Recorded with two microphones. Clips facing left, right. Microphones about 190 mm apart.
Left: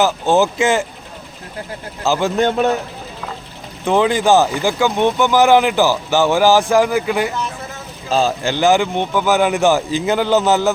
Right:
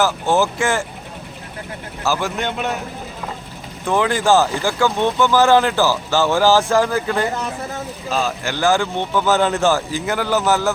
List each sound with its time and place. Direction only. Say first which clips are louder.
0.0 s speech: left 3 dB; 20° left (ahead or behind)
2.0 s speech: left 4 dB; 25° left (ahead or behind)
3.8 s speech: left 3 dB; 20° left (ahead or behind)
8.1 s speech: left 5 dB; 30° left (ahead or behind)